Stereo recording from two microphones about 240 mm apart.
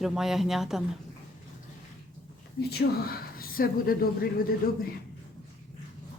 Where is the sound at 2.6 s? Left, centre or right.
Left.